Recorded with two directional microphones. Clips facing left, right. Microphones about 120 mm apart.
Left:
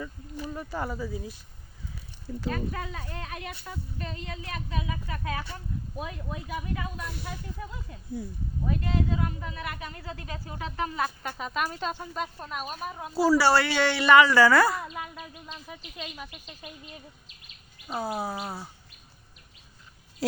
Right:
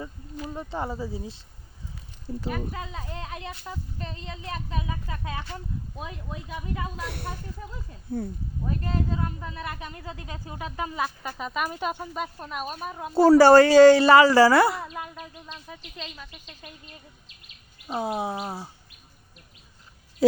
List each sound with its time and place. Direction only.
0.5 s a woman's voice: 25° right (ahead or behind)
2.5 s a woman's voice: 20° right (ahead or behind)
7.0 s speech: 65° right (ahead or behind)
8.2 s speech: 55° right (ahead or behind)
8.8 s a woman's voice: 40° right (ahead or behind); by 11.0 s 15° right (ahead or behind)
11.0 s speech: centre (ahead or behind)
11.7 s speech: 10° right (ahead or behind)
13.1 s a woman's voice: 55° right (ahead or behind); by 14.8 s 25° right (ahead or behind)
14.8 s speech: 5° left (ahead or behind)
17.9 s a woman's voice: 20° right (ahead or behind)
18.4 s bird: 15° right (ahead or behind)